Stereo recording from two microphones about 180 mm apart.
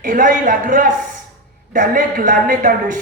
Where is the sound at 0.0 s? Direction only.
45° right (ahead or behind).